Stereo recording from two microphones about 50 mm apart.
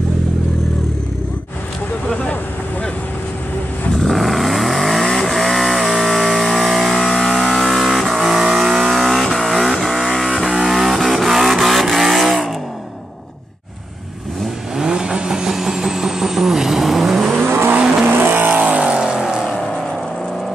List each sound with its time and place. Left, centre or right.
3.9 s vehicle: centre
10.4 s vehicle: centre
14.8 s vehicle: centre
17.5 s vehicle: right
18.6 s vehicle: right
18.9 s vehicle: centre